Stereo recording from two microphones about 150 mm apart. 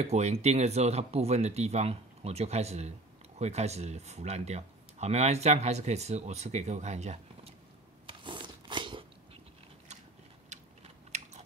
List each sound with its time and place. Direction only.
0.0 s speech: 45° right (ahead or behind)
8.1 s a sound: 35° right (ahead or behind)
10.5 s typing: 50° right (ahead or behind)
11.1 s biting: 50° right (ahead or behind)